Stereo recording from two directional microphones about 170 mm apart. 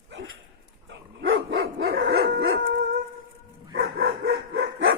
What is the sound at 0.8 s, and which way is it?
Dog, 90° right.